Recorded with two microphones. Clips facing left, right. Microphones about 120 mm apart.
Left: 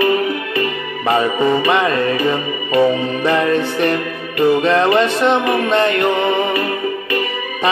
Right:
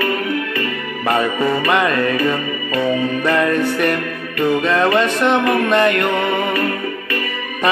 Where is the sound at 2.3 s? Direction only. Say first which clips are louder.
Left 2 dB; 25° left (ahead or behind).